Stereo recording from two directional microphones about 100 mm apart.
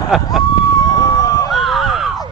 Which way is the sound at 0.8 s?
40° left (ahead or behind).